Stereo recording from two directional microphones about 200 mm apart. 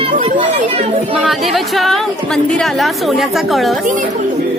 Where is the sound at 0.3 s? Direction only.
30° right (ahead or behind).